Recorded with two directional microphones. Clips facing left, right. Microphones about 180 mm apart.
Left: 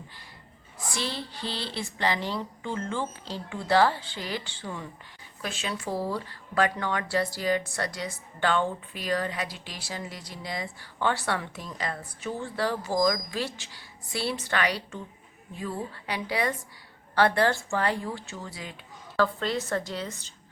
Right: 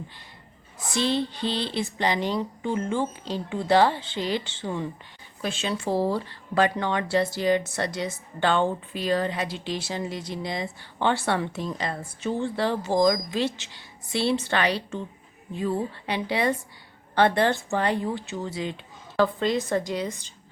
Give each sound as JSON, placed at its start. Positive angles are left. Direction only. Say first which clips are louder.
{"t": 0.9, "sound": "speech", "louder": "right 9 dB", "side_deg": -20}